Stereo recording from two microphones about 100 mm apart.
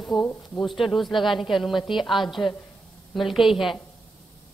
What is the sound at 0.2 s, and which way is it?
Speech, 20° left (ahead or behind).